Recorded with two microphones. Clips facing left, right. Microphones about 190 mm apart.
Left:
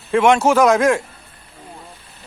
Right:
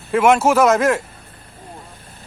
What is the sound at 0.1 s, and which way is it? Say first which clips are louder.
Speech: even; 5° right (ahead or behind).